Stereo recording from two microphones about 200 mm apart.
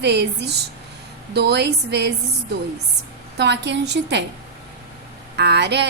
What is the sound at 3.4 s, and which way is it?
Speech, 60° right (ahead or behind).